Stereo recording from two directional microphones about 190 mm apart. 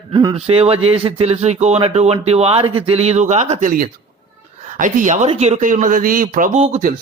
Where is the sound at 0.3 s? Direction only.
30° right (ahead or behind).